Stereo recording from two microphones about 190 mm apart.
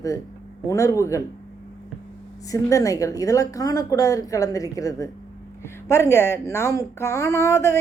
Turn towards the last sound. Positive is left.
turn(degrees=15)  # may be behind; listen again after turning